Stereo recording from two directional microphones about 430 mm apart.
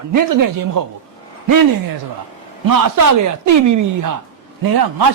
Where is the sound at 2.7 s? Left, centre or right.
Right.